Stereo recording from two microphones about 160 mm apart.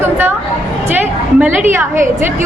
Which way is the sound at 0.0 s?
15° right (ahead or behind).